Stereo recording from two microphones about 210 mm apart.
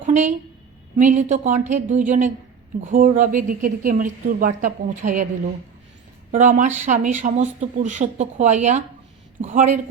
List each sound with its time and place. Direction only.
0.0 s a sound: 35° right (ahead or behind)
0.9 s a woman's voice: 35° right (ahead or behind)
6.3 s a woman's voice: 35° right (ahead or behind)